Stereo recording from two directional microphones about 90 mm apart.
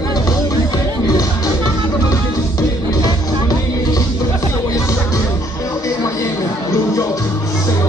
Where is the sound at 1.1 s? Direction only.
40° left (ahead or behind).